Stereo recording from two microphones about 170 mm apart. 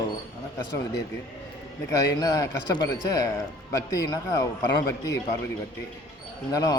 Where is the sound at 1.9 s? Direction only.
20° left (ahead or behind).